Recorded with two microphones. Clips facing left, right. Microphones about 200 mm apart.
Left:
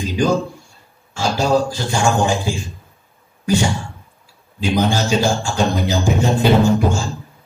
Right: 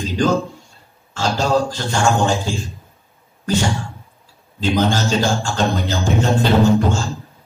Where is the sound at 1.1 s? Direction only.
10° left (ahead or behind).